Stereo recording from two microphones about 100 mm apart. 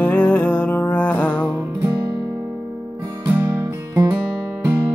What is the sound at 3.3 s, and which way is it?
Music, 20° right (ahead or behind).